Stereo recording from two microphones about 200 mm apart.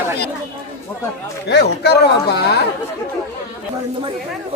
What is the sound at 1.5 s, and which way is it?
Speech, 55° left (ahead or behind).